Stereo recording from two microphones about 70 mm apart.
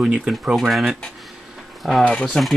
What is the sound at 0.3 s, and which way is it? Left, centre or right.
Speech, centre.